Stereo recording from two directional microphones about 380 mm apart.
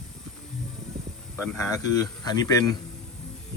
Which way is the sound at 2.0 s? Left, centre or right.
Centre.